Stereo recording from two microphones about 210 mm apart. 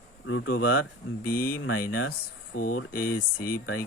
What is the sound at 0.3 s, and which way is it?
Speech, 70° left (ahead or behind).